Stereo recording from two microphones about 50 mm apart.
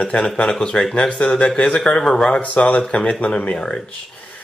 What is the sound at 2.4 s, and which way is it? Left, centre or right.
Speech, left.